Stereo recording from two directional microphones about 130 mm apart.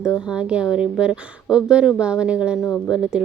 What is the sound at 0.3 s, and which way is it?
Speech, 5° right (ahead or behind).